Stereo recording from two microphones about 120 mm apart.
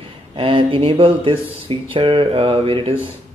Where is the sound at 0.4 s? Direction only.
50° right (ahead or behind).